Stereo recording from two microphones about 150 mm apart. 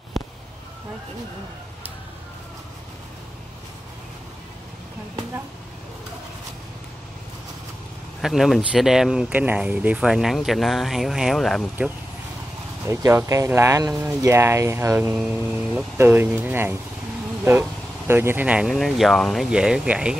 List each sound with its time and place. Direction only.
8.2 s speech: centre (ahead or behind)
12.8 s speech: 20° right (ahead or behind)